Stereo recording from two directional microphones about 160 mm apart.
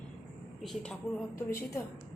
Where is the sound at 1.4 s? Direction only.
15° left (ahead or behind).